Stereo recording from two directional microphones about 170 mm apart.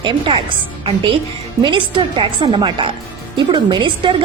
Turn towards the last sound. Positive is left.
turn(degrees=-25)  # may be behind; listen again after turning